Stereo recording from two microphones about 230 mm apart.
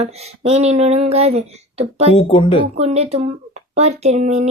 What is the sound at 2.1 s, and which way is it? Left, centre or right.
Speech, left.